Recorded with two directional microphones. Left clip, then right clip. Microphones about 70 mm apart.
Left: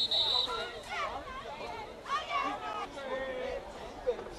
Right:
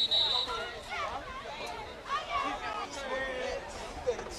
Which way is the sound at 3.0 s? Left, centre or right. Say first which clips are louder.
Right 2 dB; right.